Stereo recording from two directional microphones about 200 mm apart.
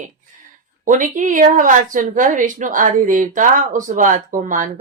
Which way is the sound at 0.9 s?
40° right (ahead or behind).